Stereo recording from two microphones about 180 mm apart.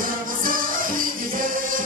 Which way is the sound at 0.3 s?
50° right (ahead or behind).